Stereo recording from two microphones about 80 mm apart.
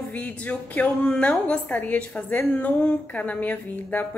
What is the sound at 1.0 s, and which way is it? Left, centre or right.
A woman's voice, centre.